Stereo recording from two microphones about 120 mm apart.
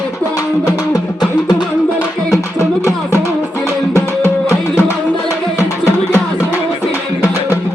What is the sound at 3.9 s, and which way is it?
Music, 20° right (ahead or behind).